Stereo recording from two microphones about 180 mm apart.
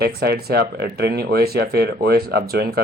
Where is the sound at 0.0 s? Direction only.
60° right (ahead or behind).